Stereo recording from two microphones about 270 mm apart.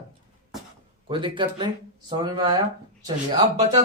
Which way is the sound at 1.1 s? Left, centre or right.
Centre.